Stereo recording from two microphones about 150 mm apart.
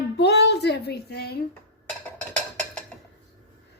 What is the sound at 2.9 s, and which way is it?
Dishes, 5° left (ahead or behind).